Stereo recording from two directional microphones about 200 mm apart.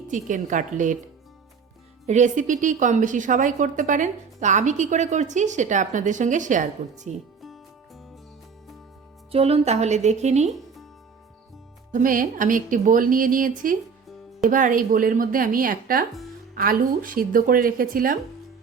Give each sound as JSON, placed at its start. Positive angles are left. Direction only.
{"t": 0.1, "sound": "a woman's voice", "side_deg": -40}
{"t": 2.0, "sound": "a woman's voice", "side_deg": -35}
{"t": 7.4, "sound": "music", "side_deg": 0}
{"t": 9.3, "sound": "a woman's voice", "side_deg": -30}
{"t": 11.9, "sound": "speech", "side_deg": -40}